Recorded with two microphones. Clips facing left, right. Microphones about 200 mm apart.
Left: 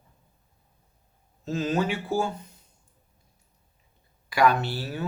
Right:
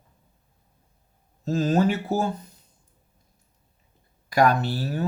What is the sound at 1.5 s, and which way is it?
Speech, 40° right (ahead or behind).